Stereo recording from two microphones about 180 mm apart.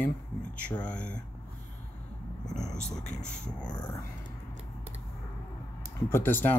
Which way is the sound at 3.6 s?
20° left (ahead or behind).